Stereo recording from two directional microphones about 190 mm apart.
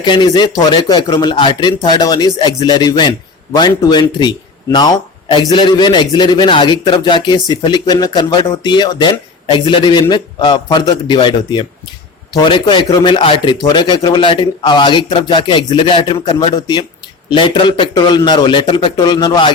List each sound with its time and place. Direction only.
0.0 s speech: 25° left (ahead or behind)